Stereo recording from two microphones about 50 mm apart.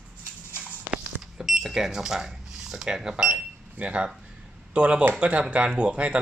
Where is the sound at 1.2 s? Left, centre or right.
Centre.